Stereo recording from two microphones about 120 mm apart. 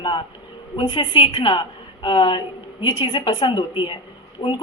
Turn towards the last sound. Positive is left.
turn(degrees=50)  # may be behind; listen again after turning